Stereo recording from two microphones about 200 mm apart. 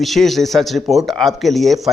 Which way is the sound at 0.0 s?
Centre (ahead or behind).